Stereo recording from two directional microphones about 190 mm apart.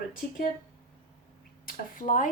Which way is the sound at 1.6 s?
45° left (ahead or behind).